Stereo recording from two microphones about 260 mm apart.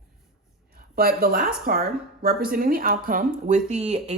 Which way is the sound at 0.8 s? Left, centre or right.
Right.